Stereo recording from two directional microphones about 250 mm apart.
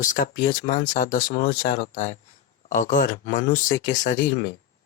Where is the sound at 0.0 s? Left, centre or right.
Left.